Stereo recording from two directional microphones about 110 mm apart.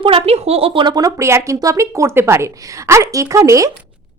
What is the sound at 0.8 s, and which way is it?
Speech, 35° right (ahead or behind).